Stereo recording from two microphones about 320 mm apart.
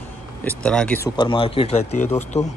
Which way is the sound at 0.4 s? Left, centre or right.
Centre.